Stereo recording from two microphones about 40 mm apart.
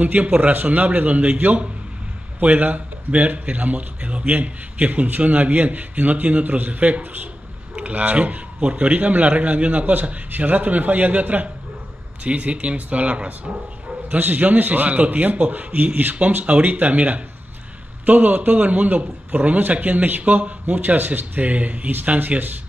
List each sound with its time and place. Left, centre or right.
0.0 s a man's voice: right
7.7 s a man's voice: right
14.1 s a man's voice: right